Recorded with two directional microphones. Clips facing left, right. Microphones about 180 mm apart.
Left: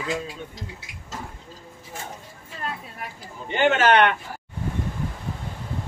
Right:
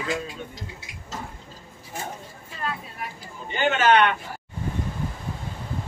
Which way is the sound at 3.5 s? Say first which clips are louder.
Left 1 dB; 70° left (ahead or behind).